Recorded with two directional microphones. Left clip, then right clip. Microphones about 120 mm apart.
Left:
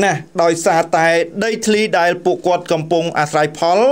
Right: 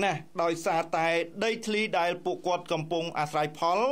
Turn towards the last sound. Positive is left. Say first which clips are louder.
# left 13 dB
turn(degrees=35)  # may be behind; listen again after turning